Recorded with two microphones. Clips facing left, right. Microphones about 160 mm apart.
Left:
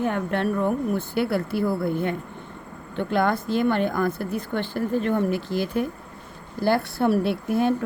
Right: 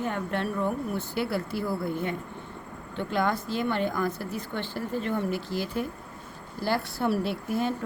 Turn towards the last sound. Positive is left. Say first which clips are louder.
# left 6 dB
turn(degrees=60)  # may be behind; listen again after turning